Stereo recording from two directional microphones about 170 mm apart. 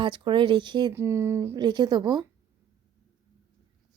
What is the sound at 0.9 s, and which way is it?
Speech, 15° right (ahead or behind).